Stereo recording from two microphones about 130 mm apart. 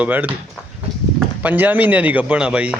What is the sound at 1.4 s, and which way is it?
A man's voice, 10° right (ahead or behind).